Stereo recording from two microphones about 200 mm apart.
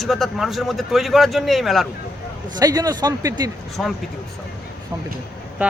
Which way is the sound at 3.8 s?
Centre (ahead or behind).